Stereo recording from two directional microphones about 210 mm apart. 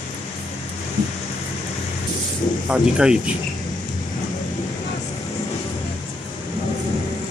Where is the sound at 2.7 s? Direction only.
5° right (ahead or behind).